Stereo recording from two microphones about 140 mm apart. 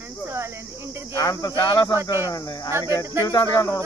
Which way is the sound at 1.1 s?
25° left (ahead or behind).